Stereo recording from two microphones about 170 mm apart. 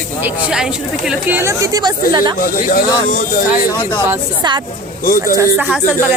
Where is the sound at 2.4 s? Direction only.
55° left (ahead or behind).